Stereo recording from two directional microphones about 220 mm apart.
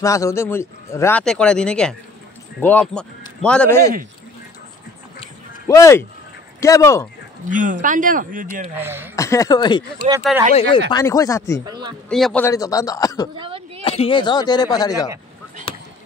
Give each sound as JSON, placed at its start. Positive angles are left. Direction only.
{"t": 0.0, "sound": "a man's voice", "side_deg": 15}
{"t": 5.7, "sound": "a man's voice", "side_deg": 15}
{"t": 7.4, "sound": "speech", "side_deg": -35}
{"t": 8.7, "sound": "speech", "side_deg": -10}
{"t": 9.1, "sound": "a man's voice", "side_deg": 15}
{"t": 10.9, "sound": "a man's voice", "side_deg": 15}
{"t": 11.6, "sound": "speech", "side_deg": -20}
{"t": 12.1, "sound": "a man's voice", "side_deg": 5}
{"t": 13.4, "sound": "a sound", "side_deg": -25}
{"t": 13.8, "sound": "speech", "side_deg": 25}